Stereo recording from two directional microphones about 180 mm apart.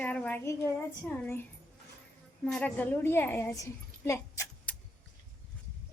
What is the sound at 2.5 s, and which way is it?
A child's voice, 5° left (ahead or behind).